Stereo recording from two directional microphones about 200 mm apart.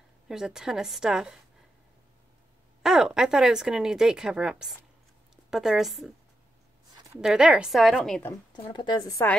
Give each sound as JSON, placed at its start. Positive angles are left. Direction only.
{"t": 0.3, "sound": "speech", "side_deg": -5}
{"t": 2.8, "sound": "a woman's voice", "side_deg": -5}
{"t": 7.2, "sound": "speech", "side_deg": -5}
{"t": 8.7, "sound": "a woman's voice", "side_deg": 20}